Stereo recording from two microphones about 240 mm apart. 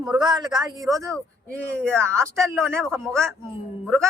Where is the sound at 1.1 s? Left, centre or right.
Centre.